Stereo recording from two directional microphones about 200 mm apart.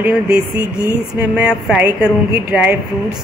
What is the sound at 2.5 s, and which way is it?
Speech, 5° right (ahead or behind).